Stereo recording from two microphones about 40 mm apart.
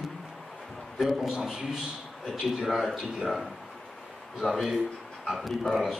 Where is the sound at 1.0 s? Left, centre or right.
Centre.